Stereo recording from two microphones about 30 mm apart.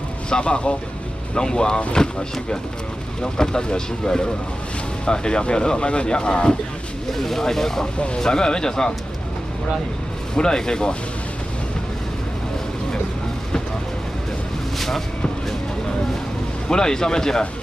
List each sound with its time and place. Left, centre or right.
0.3 s speech: left
1.3 s speech: left
3.2 s speech: left
7.2 s speech: centre
7.8 s speech: left
8.2 s speech: left
10.3 s speech: left
16.6 s speech: left